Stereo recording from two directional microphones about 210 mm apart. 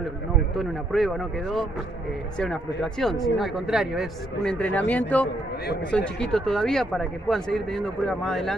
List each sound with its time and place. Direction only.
0.6 s speech: centre (ahead or behind)